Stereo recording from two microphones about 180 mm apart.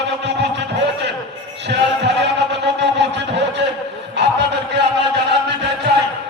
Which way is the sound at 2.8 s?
75° right (ahead or behind).